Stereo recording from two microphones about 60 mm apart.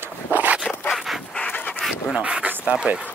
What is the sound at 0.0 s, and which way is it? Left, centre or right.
Dog, right.